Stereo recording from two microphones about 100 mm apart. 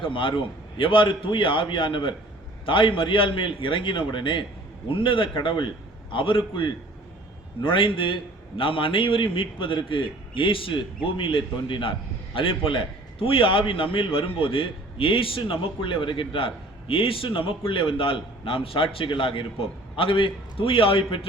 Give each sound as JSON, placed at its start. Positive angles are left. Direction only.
{"t": 0.0, "sound": "a man's voice", "side_deg": 60}